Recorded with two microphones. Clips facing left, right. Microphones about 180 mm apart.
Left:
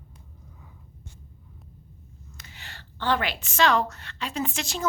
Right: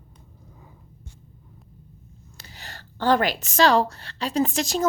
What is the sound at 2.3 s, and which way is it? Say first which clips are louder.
A woman's voice: right 4 dB; 35° right (ahead or behind).